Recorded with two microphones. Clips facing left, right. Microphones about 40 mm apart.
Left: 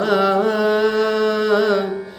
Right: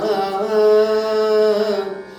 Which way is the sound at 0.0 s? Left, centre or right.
Left.